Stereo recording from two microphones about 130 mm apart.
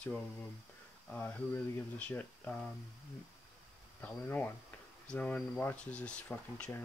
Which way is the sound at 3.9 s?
15° left (ahead or behind).